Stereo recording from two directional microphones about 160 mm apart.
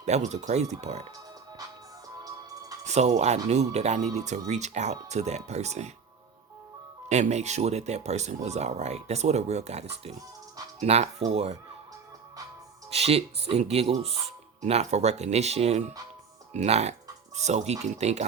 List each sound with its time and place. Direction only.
0.0 s speech: 45° right (ahead or behind)
2.8 s speech: 45° right (ahead or behind)
7.1 s speech: 45° right (ahead or behind)
12.9 s speech: 40° right (ahead or behind)